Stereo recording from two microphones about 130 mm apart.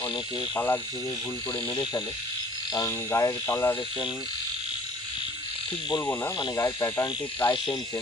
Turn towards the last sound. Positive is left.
turn(degrees=25)  # may be behind; listen again after turning